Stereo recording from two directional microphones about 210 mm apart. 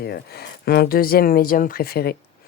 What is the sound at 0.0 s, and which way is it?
Speech, 50° left (ahead or behind).